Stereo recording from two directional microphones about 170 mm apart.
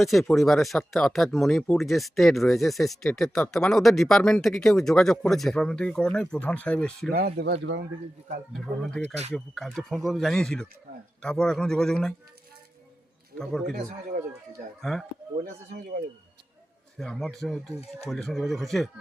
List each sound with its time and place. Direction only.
0.0 s speech: centre (ahead or behind)
7.1 s speech: 65° right (ahead or behind)
7.6 s speech: 90° right
8.5 s speech: centre (ahead or behind)
13.4 s speech: 5° left (ahead or behind)
14.8 s speech: centre (ahead or behind)
15.4 s speech: 60° right (ahead or behind)
17.0 s speech: centre (ahead or behind)